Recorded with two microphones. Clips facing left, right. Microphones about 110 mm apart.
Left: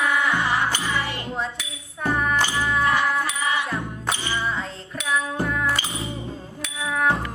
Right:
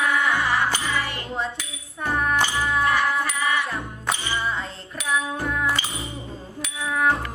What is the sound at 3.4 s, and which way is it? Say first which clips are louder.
Music: right 1 dB; 25° left (ahead or behind).